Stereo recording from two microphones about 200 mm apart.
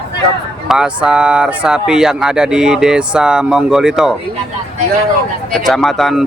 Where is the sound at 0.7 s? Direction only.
5° right (ahead or behind).